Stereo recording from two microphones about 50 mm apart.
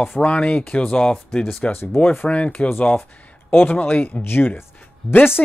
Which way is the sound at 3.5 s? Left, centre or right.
Left.